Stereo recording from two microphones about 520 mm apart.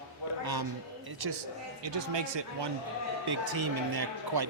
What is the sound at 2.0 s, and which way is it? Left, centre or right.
Speech, right.